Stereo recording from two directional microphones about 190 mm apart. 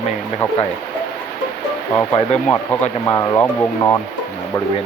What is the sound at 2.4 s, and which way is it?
Speech, 10° left (ahead or behind).